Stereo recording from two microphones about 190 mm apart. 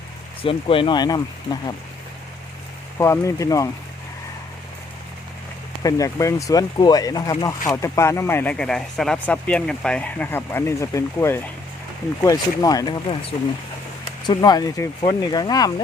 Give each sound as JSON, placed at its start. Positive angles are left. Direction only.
{"t": 0.4, "sound": "speech", "side_deg": 30}
{"t": 3.0, "sound": "speech", "side_deg": 15}
{"t": 5.8, "sound": "speech", "side_deg": 15}
{"t": 14.3, "sound": "speech", "side_deg": 20}